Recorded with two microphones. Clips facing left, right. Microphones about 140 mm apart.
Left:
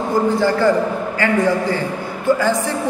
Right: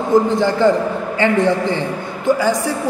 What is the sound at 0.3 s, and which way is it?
Speech, 20° right (ahead or behind).